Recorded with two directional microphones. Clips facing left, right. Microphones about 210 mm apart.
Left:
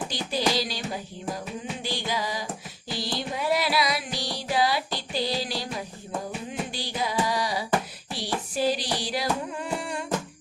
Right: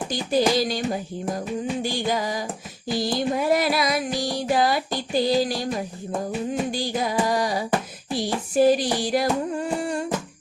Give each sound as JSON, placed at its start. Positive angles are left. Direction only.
{"t": 0.1, "sound": "music", "side_deg": -50}
{"t": 1.8, "sound": "music", "side_deg": -50}
{"t": 6.5, "sound": "a sound", "side_deg": -45}
{"t": 8.1, "sound": "music", "side_deg": -45}